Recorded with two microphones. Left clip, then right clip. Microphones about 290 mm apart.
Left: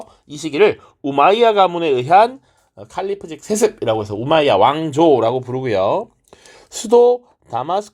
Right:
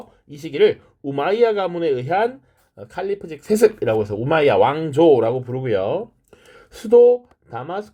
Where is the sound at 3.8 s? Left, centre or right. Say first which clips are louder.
Left 1 dB; left.